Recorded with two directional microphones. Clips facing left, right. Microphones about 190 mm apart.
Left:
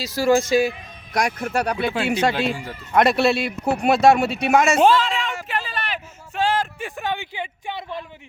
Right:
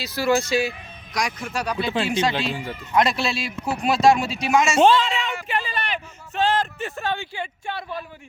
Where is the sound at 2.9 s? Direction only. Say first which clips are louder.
Left 5 dB; 60° left (ahead or behind).